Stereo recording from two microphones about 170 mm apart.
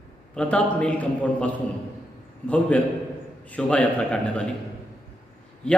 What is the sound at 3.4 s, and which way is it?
A man's voice, 10° left (ahead or behind).